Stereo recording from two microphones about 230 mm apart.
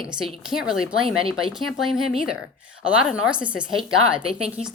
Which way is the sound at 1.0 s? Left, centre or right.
Right.